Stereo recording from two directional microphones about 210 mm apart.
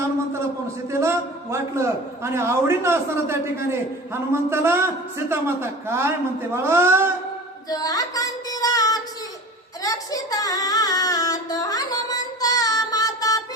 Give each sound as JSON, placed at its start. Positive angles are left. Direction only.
{"t": 0.9, "sound": "a man's voice", "side_deg": -15}
{"t": 7.7, "sound": "child singing", "side_deg": 15}